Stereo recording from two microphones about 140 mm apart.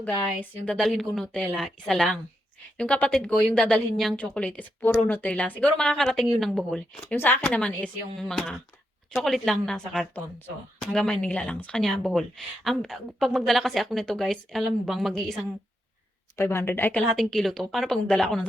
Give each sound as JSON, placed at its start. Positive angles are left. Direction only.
{"t": 0.0, "sound": "a woman's voice", "side_deg": 10}
{"t": 7.1, "sound": "a woman's voice", "side_deg": 15}
{"t": 16.3, "sound": "a woman's voice", "side_deg": 20}
{"t": 17.2, "sound": "speech", "side_deg": 5}